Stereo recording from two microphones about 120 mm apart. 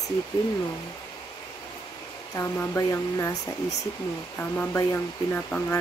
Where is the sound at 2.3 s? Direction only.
20° left (ahead or behind).